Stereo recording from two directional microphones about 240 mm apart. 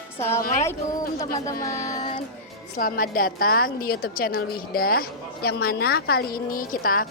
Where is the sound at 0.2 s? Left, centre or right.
Centre.